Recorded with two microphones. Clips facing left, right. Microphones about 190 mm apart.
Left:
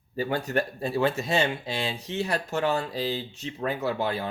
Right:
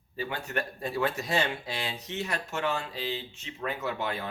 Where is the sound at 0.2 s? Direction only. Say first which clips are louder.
Left 7 dB; 40° left (ahead or behind).